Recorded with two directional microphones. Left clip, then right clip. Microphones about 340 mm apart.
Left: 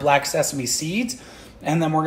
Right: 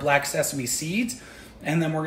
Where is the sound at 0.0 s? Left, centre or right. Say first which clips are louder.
Left 4 dB; centre.